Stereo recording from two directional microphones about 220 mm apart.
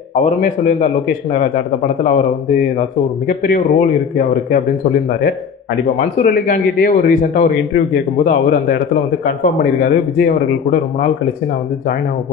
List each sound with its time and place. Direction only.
0.2 s a man's voice: 35° left (ahead or behind)
3.3 s a man's voice: 40° left (ahead or behind)
5.9 s a man's voice: 40° left (ahead or behind)